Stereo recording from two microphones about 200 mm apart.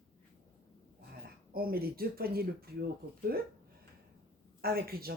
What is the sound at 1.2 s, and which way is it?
Speech, 50° right (ahead or behind).